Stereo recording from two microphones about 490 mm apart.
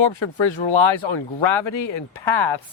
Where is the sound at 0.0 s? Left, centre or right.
Left.